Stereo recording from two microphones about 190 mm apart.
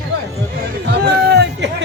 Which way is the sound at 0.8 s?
60° right (ahead or behind).